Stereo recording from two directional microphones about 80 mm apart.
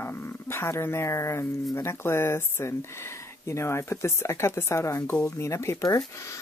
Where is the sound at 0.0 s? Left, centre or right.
Left.